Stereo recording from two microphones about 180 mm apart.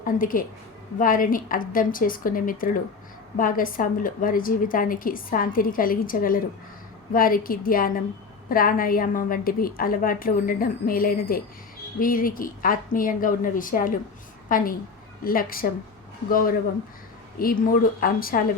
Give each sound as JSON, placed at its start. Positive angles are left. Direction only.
{"t": 0.0, "sound": "a woman's voice", "side_deg": 50}